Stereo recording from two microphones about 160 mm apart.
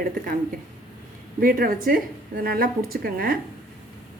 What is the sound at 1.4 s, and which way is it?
A woman's voice, 65° right (ahead or behind).